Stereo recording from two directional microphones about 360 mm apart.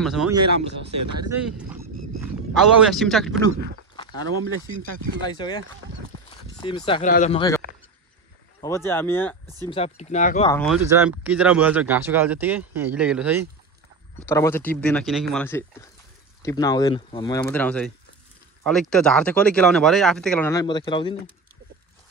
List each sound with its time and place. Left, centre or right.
0.0 s speech: centre
5.2 s speech: centre
9.7 s speech: centre
10.5 s speech: centre
14.2 s speech: centre